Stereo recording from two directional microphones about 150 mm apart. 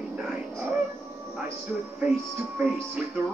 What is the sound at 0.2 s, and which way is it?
Music, 10° right (ahead or behind).